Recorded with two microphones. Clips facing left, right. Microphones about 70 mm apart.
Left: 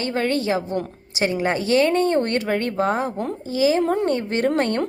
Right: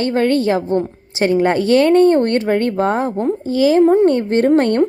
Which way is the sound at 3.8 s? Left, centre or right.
Right.